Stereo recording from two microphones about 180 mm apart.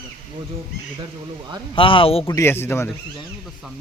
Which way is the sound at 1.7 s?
30° left (ahead or behind).